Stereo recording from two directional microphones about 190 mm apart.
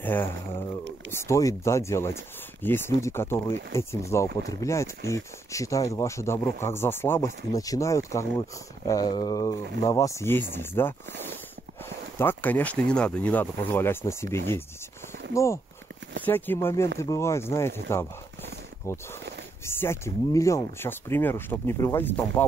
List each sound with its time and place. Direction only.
0.0 s speech: 10° left (ahead or behind)